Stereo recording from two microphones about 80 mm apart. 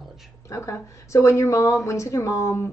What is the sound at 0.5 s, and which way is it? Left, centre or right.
Speech, left.